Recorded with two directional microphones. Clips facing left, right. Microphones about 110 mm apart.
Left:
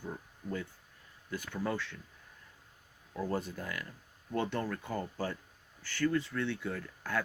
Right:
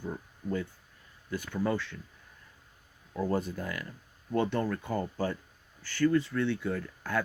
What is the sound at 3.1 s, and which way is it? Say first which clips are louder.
Speech: right 5 dB; 60° right (ahead or behind).